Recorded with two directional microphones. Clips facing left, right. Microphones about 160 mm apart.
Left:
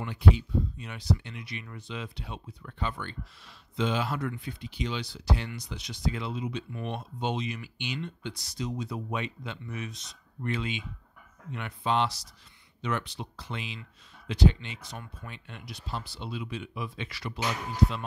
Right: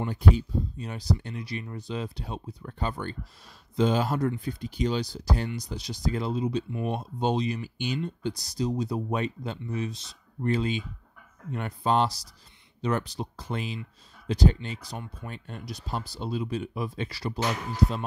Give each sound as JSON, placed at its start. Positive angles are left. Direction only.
{"t": 0.0, "sound": "speech", "side_deg": -40}